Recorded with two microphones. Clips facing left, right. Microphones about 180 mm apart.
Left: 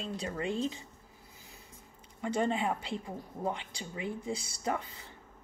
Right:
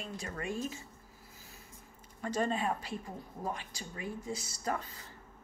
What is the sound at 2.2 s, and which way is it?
Speech, 15° left (ahead or behind).